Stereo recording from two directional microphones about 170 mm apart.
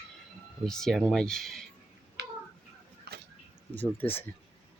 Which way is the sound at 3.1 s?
65° right (ahead or behind).